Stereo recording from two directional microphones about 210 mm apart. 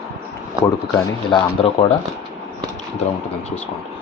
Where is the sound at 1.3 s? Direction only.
25° left (ahead or behind).